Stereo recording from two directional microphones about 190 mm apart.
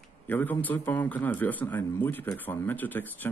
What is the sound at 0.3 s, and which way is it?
A man's voice, 10° left (ahead or behind).